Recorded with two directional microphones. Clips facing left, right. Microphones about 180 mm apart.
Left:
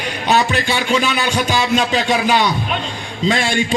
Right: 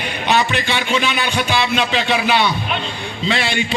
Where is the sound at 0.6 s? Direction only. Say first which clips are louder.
Left 2 dB; 45° left (ahead or behind).